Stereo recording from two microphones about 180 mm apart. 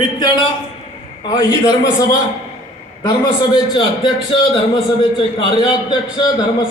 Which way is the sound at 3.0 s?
25° left (ahead or behind).